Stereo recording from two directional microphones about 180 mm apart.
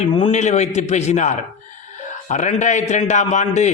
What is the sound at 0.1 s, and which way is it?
A man's voice, 35° left (ahead or behind).